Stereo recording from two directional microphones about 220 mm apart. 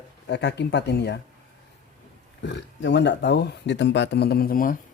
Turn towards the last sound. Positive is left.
turn(degrees=40)  # may be behind; listen again after turning